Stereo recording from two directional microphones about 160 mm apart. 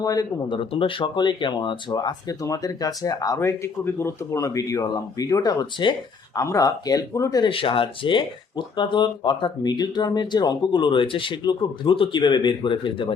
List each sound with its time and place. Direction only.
0.0 s speech: 25° left (ahead or behind)